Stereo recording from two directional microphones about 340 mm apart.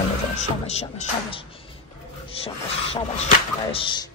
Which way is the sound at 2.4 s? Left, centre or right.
Centre.